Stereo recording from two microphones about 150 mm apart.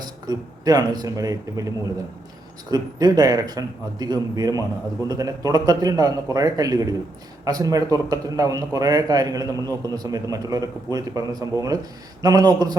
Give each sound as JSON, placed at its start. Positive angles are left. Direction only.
{"t": 0.0, "sound": "speech", "side_deg": -25}
{"t": 2.6, "sound": "a man's voice", "side_deg": -25}